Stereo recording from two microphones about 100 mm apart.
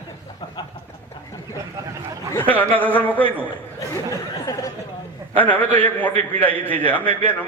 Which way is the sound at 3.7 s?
35° left (ahead or behind).